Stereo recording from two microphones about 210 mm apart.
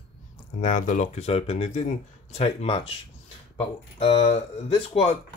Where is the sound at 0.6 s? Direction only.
35° left (ahead or behind).